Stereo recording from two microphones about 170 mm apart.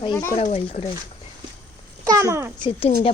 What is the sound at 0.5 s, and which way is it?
Speech, 35° left (ahead or behind).